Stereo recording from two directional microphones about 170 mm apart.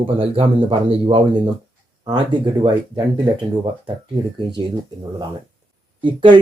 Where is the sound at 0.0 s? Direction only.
30° right (ahead or behind).